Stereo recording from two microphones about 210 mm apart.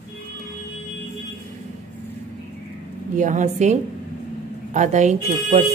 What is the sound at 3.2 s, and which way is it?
Speech, 35° right (ahead or behind).